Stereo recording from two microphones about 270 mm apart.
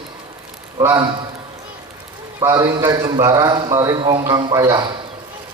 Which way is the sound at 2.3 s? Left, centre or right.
Centre.